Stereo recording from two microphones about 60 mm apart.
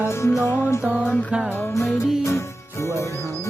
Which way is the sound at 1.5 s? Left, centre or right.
Left.